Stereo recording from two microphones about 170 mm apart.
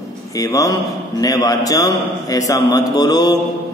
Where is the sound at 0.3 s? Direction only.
20° left (ahead or behind).